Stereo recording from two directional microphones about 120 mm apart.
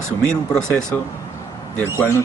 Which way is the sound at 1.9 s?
20° left (ahead or behind).